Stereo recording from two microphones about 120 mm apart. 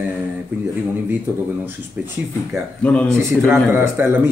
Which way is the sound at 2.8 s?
10° left (ahead or behind).